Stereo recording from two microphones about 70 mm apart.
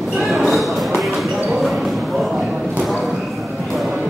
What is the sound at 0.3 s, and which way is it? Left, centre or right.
Basketball bounce, centre.